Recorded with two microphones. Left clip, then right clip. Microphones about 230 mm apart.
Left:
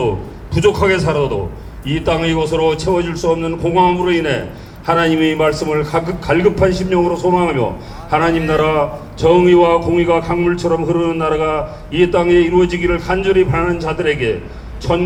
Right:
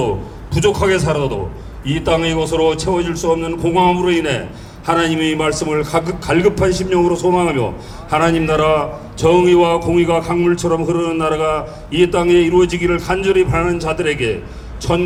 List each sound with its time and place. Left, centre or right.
0.5 s a man's voice: right